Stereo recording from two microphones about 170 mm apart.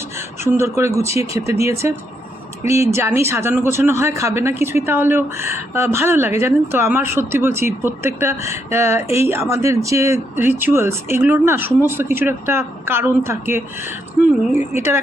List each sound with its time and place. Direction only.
0.4 s a man's voice: 15° right (ahead or behind)